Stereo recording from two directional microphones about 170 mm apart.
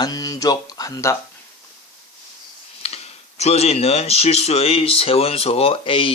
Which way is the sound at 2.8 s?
40° left (ahead or behind).